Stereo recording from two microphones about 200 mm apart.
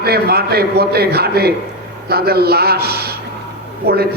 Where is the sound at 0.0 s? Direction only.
50° right (ahead or behind).